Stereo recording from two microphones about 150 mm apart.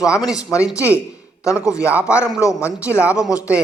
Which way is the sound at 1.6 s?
20° left (ahead or behind).